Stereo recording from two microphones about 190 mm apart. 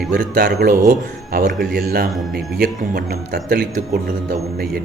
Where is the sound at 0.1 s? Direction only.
55° right (ahead or behind).